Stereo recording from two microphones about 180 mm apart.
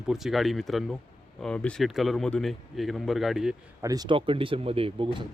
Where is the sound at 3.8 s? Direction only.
20° right (ahead or behind).